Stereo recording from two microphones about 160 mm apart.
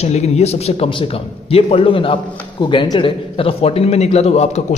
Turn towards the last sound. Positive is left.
turn(degrees=40)  # may be behind; listen again after turning